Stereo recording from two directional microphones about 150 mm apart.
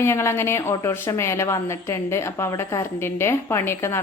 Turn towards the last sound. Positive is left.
turn(degrees=15)  # may be behind; listen again after turning